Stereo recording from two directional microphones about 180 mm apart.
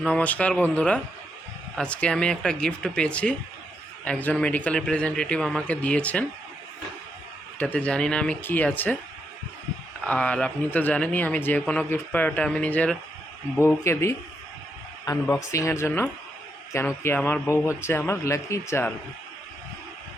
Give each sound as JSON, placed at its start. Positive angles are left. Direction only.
{"t": 0.0, "sound": "a man's voice", "side_deg": 5}
{"t": 7.6, "sound": "a man's voice", "side_deg": 10}
{"t": 10.0, "sound": "a man's voice", "side_deg": 5}